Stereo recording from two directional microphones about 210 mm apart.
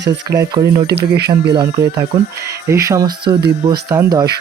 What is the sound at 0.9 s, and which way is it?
Speech, 50° right (ahead or behind).